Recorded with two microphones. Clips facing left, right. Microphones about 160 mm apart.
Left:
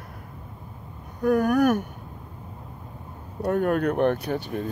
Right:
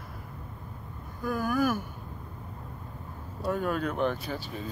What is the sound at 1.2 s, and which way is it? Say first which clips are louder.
Speech: left 8 dB; 70° left (ahead or behind).